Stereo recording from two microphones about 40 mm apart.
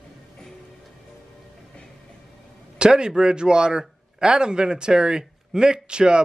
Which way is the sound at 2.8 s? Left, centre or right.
Right.